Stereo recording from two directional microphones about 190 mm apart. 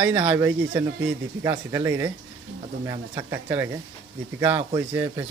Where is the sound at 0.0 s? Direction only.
10° right (ahead or behind).